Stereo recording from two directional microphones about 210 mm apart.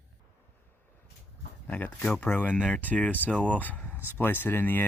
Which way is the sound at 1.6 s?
10° left (ahead or behind).